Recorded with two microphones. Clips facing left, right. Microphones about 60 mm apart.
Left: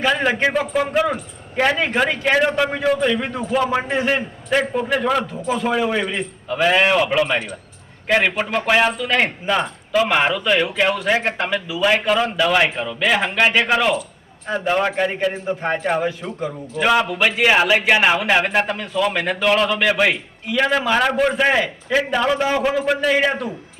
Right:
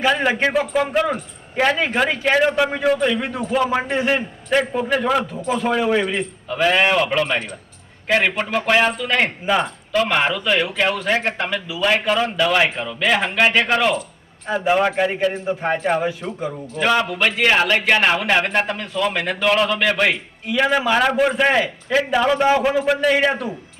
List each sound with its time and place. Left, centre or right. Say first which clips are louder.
0.0 s a man's voice: even; centre